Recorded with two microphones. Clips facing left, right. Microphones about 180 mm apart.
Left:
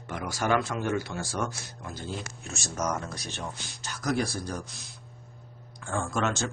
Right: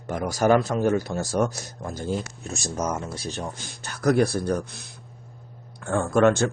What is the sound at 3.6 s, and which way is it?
Speech, 60° right (ahead or behind).